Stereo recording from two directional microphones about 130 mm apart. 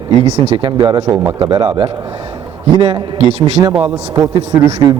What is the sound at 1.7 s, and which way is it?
A man's voice, 45° right (ahead or behind).